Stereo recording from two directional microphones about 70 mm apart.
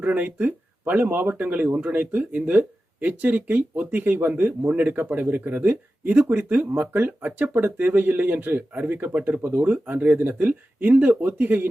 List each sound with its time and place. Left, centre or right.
0.0 s speech: right